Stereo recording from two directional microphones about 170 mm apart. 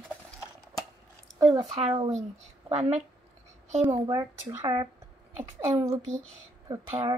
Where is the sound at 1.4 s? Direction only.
35° right (ahead or behind).